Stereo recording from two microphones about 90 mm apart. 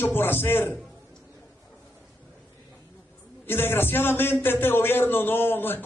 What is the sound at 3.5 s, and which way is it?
A man's voice, 25° left (ahead or behind).